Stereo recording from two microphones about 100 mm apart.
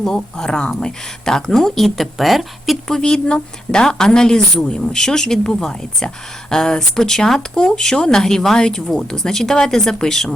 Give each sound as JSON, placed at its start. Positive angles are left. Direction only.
{"t": 0.0, "sound": "speech", "side_deg": 5}